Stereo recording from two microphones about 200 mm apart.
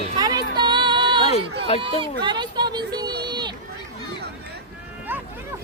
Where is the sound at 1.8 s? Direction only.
25° right (ahead or behind).